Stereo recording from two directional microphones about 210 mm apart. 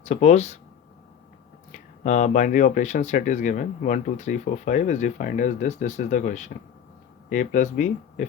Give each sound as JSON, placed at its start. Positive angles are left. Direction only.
{"t": 0.0, "sound": "speech", "side_deg": 35}
{"t": 2.0, "sound": "speech", "side_deg": 35}